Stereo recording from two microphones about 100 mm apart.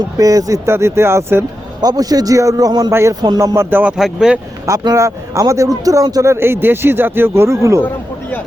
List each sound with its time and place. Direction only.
0.2 s a man's voice: 35° right (ahead or behind)
1.8 s a man's voice: 40° right (ahead or behind)
2.9 s a man's voice: 30° right (ahead or behind)
3.9 s speech: 5° right (ahead or behind)
4.9 s a man's voice: 30° right (ahead or behind)
6.3 s a man's voice: 25° right (ahead or behind)